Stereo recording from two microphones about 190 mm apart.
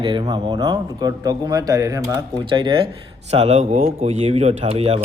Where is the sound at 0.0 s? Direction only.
20° right (ahead or behind).